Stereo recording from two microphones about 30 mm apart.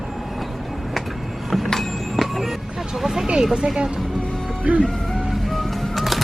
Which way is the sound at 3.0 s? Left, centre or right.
Centre.